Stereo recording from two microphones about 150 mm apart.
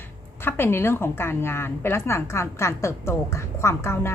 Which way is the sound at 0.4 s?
15° left (ahead or behind).